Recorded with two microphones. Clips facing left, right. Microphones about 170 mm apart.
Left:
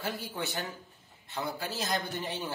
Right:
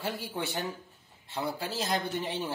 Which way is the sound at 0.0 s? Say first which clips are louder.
Right 1 dB; 30° right (ahead or behind).